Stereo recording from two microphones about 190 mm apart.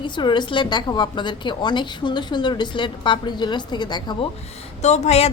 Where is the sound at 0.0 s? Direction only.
25° left (ahead or behind).